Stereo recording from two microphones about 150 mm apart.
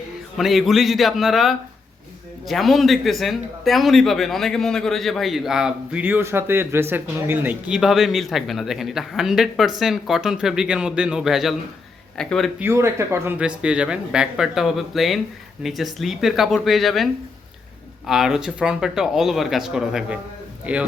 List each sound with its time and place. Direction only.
0.3 s a man's voice: centre (ahead or behind)
12.5 s speech: 15° right (ahead or behind)
13.4 s a man's voice: 5° right (ahead or behind)